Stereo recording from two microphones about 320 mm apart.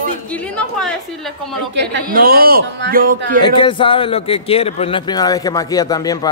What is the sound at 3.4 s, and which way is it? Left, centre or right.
A man's voice, centre.